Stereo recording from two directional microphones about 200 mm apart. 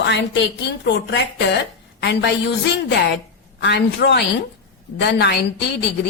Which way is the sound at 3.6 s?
60° left (ahead or behind).